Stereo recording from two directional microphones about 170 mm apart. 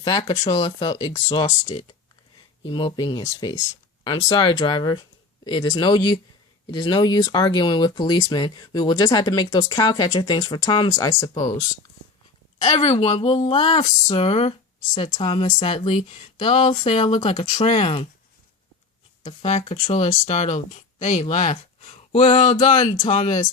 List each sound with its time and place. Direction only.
0.0 s speech: 30° left (ahead or behind)
2.6 s speech: 30° left (ahead or behind)
12.5 s speech: 40° left (ahead or behind)
19.2 s speech: 40° left (ahead or behind)
21.5 s a sound: 35° left (ahead or behind)
22.1 s speech: 45° left (ahead or behind)